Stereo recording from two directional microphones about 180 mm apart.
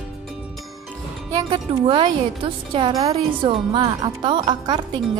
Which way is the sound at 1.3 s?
25° right (ahead or behind).